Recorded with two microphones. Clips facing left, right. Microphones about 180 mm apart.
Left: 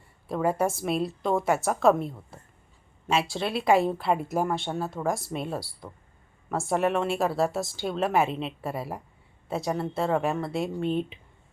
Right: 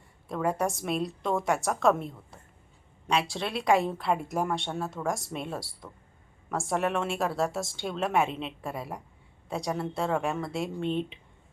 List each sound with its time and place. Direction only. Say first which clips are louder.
0.3 s a woman's voice: left 3 dB; 5° left (ahead or behind)